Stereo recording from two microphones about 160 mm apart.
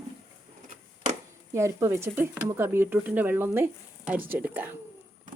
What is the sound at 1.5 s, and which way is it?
Speech, 15° right (ahead or behind).